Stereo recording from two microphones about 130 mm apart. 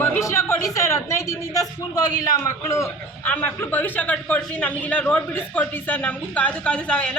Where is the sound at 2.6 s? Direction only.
20° left (ahead or behind).